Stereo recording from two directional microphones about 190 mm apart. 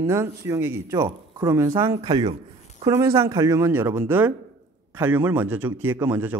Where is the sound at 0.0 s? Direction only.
15° right (ahead or behind).